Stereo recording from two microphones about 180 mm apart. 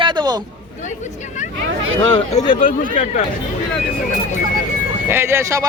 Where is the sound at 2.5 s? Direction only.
45° left (ahead or behind).